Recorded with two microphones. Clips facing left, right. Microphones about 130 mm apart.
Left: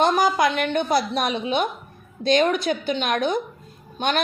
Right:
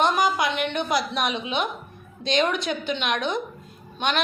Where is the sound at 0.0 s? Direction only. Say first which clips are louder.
Left 3 dB; 35° left (ahead or behind).